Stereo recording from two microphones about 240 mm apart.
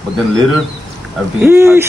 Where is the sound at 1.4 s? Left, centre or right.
Centre.